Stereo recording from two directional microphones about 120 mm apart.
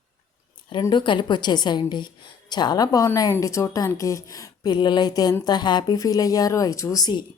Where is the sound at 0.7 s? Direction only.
40° left (ahead or behind).